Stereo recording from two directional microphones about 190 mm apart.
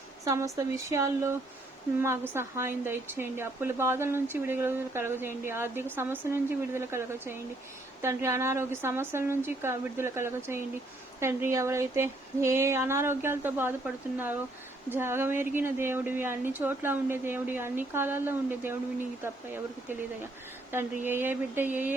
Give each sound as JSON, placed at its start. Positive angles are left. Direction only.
{"t": 0.3, "sound": "speech", "side_deg": -15}
{"t": 20.7, "sound": "speech", "side_deg": -10}